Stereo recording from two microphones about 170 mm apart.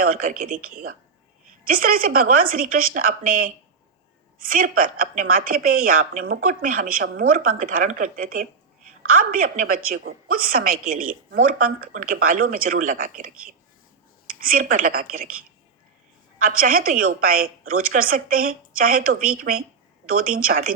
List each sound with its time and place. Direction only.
0.0 s a woman's voice: 55° right (ahead or behind)
16.4 s a woman's voice: 55° right (ahead or behind)